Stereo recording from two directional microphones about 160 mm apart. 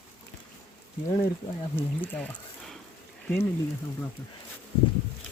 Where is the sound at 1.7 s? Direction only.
10° left (ahead or behind).